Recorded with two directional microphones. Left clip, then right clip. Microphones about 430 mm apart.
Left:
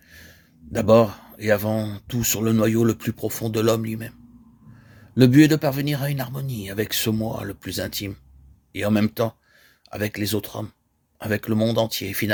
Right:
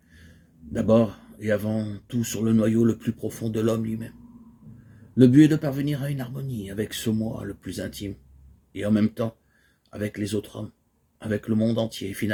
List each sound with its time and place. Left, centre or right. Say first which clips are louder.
0.7 s speech: left 5 dB; left
5.1 s speech: left 1 dB; left